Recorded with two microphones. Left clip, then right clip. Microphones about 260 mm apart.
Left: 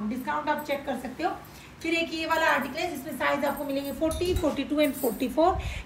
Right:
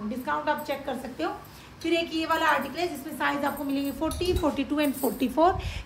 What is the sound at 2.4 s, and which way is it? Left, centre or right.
A woman's voice, centre.